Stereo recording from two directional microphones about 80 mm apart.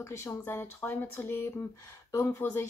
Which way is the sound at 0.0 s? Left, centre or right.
Left.